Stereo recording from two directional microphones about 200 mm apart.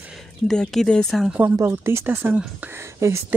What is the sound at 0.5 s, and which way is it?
Speech, 5° left (ahead or behind).